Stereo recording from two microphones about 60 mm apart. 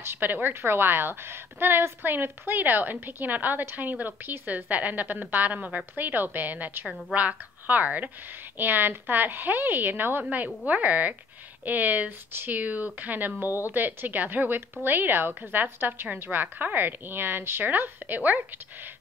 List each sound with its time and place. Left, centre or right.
0.0 s a woman's voice: right